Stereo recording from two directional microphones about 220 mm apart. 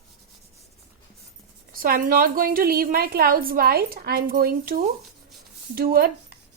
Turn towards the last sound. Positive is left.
turn(degrees=-40)  # may be behind; listen again after turning